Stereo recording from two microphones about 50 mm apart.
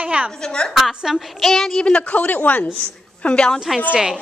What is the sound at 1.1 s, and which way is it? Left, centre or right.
Child singing, centre.